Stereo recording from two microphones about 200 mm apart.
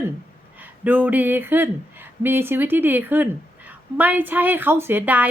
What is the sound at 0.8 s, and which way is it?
A woman's voice, 10° right (ahead or behind).